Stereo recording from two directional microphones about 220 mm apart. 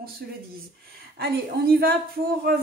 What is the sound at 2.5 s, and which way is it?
Speech, 45° right (ahead or behind).